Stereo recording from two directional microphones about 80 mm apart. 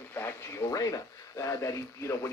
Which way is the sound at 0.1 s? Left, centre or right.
Left.